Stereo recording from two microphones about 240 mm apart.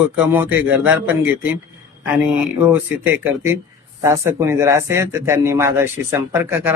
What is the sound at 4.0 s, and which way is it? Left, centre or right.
A man's voice, centre.